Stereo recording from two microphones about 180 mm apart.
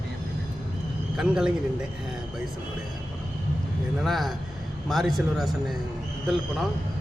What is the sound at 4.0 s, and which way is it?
A man's voice, centre (ahead or behind).